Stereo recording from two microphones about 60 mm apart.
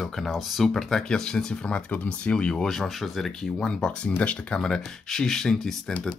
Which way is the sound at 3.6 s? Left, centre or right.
Centre.